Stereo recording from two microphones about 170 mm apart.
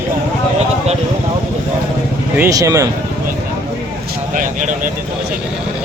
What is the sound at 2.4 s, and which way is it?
Speech, 20° right (ahead or behind).